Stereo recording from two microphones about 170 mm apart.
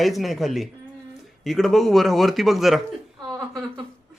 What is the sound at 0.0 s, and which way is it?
Speech, centre (ahead or behind).